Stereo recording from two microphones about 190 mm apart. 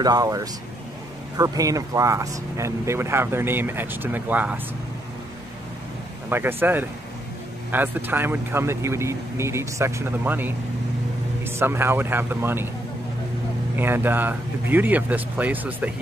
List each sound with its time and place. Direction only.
0.0 s speech: 20° right (ahead or behind)
6.2 s speech: 10° right (ahead or behind)
13.7 s speech: 10° right (ahead or behind)